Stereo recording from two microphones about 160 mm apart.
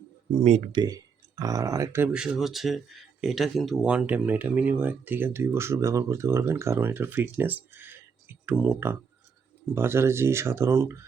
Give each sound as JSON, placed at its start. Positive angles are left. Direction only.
{"t": 0.7, "sound": "speech", "side_deg": -25}
{"t": 2.2, "sound": "speech", "side_deg": 0}